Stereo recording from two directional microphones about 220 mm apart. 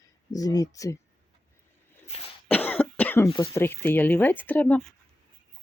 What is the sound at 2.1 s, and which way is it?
Cough, 30° left (ahead or behind).